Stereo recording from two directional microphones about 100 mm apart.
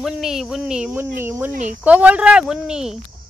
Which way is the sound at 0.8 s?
20° right (ahead or behind).